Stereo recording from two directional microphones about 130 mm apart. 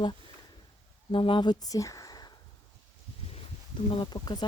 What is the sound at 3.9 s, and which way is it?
Speech, 40° left (ahead or behind).